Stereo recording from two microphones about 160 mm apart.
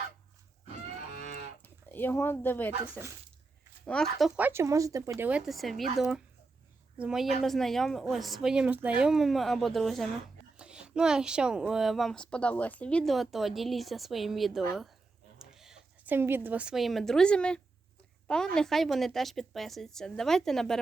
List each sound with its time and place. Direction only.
1.6 s speech: 10° left (ahead or behind)
4.4 s speech: 15° right (ahead or behind)
5.5 s a woman's voice: centre (ahead or behind)